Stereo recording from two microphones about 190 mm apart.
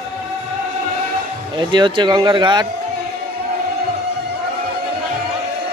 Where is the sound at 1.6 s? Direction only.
25° right (ahead or behind).